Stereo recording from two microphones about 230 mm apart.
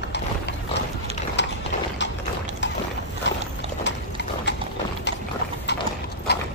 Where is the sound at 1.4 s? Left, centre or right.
Left.